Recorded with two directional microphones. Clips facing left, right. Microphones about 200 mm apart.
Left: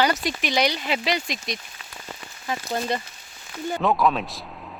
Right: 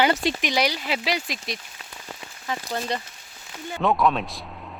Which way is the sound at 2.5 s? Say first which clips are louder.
Left 2 dB; 5° left (ahead or behind).